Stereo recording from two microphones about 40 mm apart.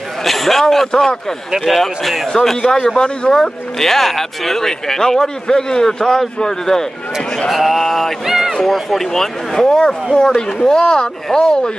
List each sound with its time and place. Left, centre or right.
0.2 s a man's voice: centre
7.4 s speech: centre
8.3 s a sound: centre
8.7 s speech: centre